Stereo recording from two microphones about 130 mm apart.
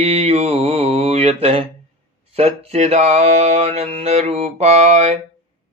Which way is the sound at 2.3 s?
55° right (ahead or behind).